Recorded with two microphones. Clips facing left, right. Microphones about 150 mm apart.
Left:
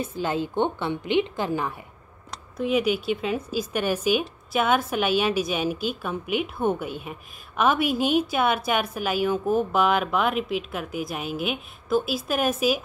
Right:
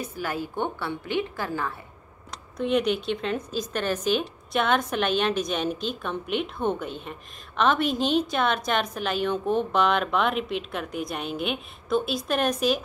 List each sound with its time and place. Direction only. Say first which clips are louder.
0.0 s a woman's voice: left 4 dB; 20° left (ahead or behind)
2.5 s a woman's voice: left 1 dB; 5° left (ahead or behind)